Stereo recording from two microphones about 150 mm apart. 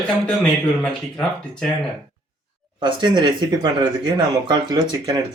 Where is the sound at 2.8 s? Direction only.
30° right (ahead or behind).